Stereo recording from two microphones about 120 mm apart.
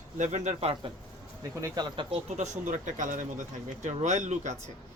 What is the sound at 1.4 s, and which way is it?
Speech, 25° right (ahead or behind).